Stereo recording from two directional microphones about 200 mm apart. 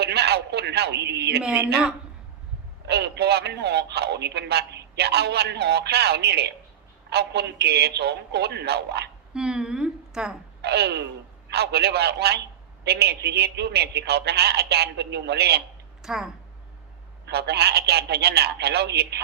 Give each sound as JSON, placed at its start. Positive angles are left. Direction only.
{"t": 0.0, "sound": "a sound", "side_deg": -55}
{"t": 1.4, "sound": "speech", "side_deg": -5}
{"t": 2.8, "sound": "a man's voice", "side_deg": -55}
{"t": 9.3, "sound": "a woman's voice", "side_deg": -5}
{"t": 10.6, "sound": "a man's voice", "side_deg": -55}
{"t": 16.0, "sound": "speech", "side_deg": 0}
{"t": 17.2, "sound": "a man's voice", "side_deg": -55}